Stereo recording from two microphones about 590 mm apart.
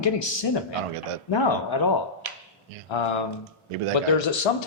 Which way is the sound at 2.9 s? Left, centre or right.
Left.